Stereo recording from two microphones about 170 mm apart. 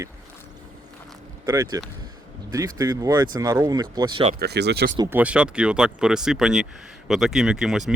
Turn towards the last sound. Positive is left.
turn(degrees=0)  # may be behind; listen again after turning